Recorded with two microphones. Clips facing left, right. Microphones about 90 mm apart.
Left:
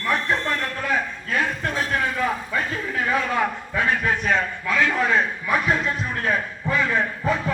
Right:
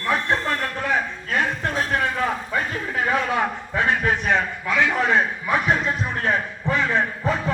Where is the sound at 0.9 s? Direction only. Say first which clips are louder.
Even; 20° right (ahead or behind).